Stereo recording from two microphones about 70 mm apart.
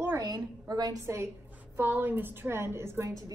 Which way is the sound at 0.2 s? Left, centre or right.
Right.